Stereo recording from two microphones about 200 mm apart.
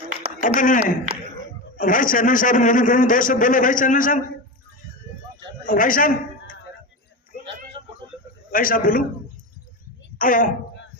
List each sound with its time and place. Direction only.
0.4 s a man's voice: 40° left (ahead or behind)
5.6 s a man's voice: 45° left (ahead or behind)
7.8 s a sound: 25° right (ahead or behind)
8.5 s a man's voice: 45° left (ahead or behind)
10.2 s a man's voice: 45° left (ahead or behind)